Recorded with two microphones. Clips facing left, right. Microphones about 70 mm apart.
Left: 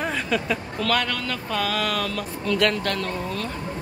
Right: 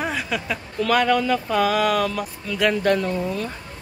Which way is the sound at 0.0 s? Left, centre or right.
Centre.